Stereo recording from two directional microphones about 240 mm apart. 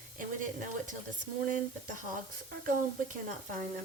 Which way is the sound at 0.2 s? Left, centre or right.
Right.